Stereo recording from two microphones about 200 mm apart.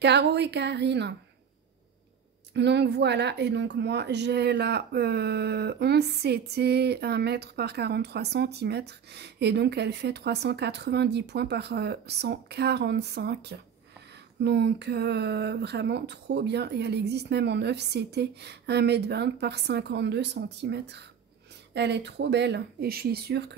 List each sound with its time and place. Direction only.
0.0 s speech: 60° right (ahead or behind)
2.5 s speech: 60° right (ahead or behind)